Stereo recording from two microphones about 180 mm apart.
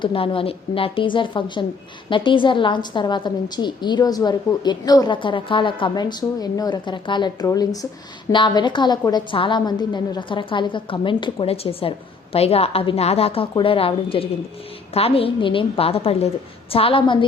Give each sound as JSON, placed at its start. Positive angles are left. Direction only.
{"t": 0.0, "sound": "a woman's voice", "side_deg": 30}